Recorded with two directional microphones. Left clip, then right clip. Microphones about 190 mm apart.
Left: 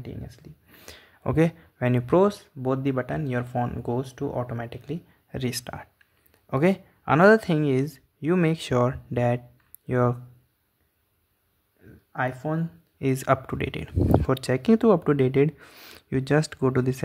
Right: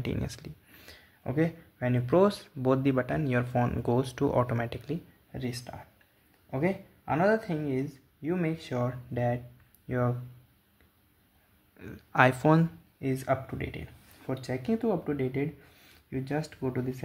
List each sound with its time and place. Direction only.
0.0 s speech: 10° right (ahead or behind)
0.7 s speech: 30° left (ahead or behind)
2.2 s speech: 10° left (ahead or behind)
5.3 s speech: 35° left (ahead or behind)
11.8 s speech: 10° right (ahead or behind)
13.0 s speech: 30° left (ahead or behind)